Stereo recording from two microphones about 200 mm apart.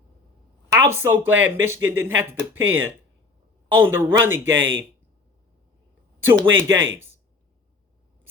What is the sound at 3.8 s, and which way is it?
Speech, 10° right (ahead or behind).